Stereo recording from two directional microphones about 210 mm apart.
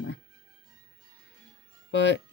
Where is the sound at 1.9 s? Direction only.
55° left (ahead or behind).